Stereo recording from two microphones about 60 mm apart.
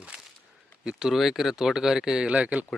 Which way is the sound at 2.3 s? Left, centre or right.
Right.